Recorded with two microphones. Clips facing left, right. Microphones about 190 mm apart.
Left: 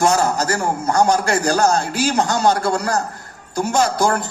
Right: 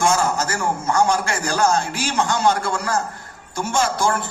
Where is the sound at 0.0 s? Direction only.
40° left (ahead or behind).